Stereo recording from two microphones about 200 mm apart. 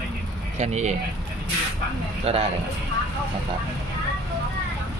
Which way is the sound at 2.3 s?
30° right (ahead or behind).